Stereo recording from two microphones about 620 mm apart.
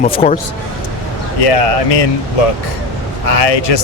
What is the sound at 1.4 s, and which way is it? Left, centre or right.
Speech, left.